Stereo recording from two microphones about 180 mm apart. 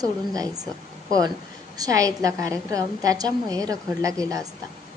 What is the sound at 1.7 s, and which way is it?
A woman's voice, 20° right (ahead or behind).